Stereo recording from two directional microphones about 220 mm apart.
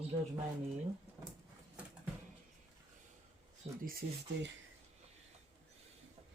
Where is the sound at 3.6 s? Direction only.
30° right (ahead or behind).